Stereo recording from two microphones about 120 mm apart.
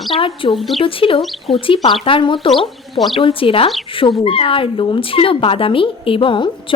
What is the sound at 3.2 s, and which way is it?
Speech, 50° left (ahead or behind).